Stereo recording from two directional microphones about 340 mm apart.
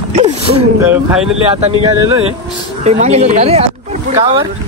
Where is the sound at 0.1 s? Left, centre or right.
Centre.